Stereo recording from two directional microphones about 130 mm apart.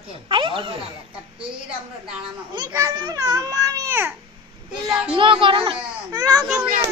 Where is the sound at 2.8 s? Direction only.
30° right (ahead or behind).